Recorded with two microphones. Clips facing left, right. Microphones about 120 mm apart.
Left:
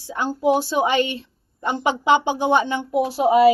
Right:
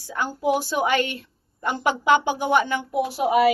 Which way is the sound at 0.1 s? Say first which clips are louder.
Left 3 dB; 25° left (ahead or behind).